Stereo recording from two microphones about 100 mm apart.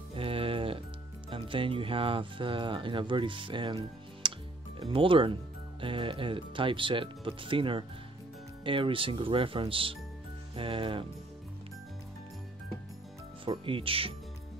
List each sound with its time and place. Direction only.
0.1 s music: 65° right (ahead or behind)
1.3 s speech: 60° right (ahead or behind)
4.2 s music: 55° right (ahead or behind)
4.7 s speech: 60° right (ahead or behind)
13.5 s speech: 65° right (ahead or behind)